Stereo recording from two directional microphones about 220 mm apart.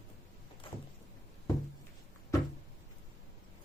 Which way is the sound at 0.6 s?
25° left (ahead or behind).